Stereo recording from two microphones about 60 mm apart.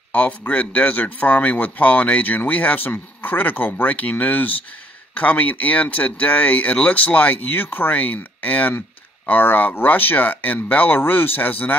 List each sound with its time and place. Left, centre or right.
0.1 s speech: left